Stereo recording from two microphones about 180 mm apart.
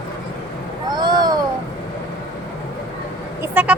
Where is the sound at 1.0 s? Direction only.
25° right (ahead or behind).